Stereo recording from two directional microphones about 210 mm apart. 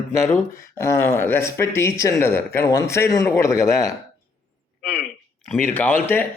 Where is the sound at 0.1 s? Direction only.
15° left (ahead or behind).